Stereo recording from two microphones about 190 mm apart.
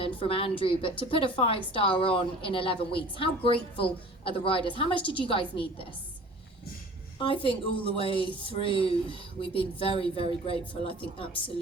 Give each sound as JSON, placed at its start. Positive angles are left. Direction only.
{"t": 0.0, "sound": "a woman's voice", "side_deg": 30}
{"t": 7.4, "sound": "a woman's voice", "side_deg": 30}